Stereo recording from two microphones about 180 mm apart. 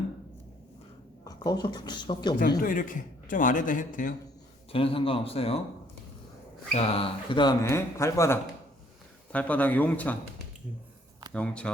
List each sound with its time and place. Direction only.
1.2 s a woman's voice: 20° left (ahead or behind)
2.6 s a man's voice: 50° left (ahead or behind)
4.7 s a man's voice: 30° left (ahead or behind)
6.7 s speech: 30° left (ahead or behind); by 10.2 s 10° left (ahead or behind)
11.3 s speech: 5° left (ahead or behind)